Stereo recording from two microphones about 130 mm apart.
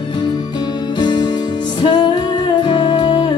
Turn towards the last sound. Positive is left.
turn(degrees=40)  # may be behind; listen again after turning